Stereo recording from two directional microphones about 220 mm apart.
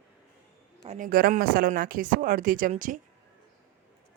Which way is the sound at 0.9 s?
40° right (ahead or behind).